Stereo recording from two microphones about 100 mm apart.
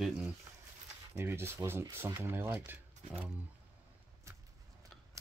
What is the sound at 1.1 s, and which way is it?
Speech, 25° right (ahead or behind).